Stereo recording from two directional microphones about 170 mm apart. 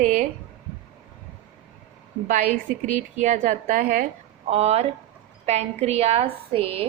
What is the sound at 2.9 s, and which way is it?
A woman's voice, 45° right (ahead or behind).